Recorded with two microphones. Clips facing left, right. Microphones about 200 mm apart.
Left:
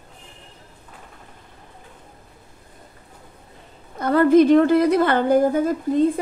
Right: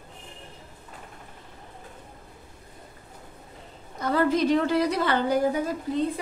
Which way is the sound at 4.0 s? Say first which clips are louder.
Left 9 dB; 55° left (ahead or behind).